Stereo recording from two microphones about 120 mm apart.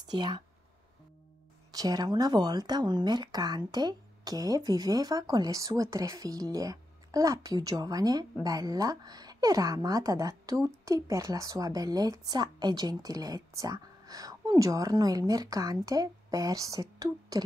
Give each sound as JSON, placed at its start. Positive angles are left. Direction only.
{"t": 0.1, "sound": "speech", "side_deg": -35}
{"t": 1.7, "sound": "speech", "side_deg": -30}